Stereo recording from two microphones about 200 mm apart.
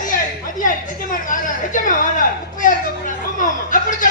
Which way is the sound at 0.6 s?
40° left (ahead or behind).